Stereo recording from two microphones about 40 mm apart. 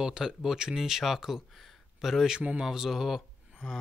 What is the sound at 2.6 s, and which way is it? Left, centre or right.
Speech, centre.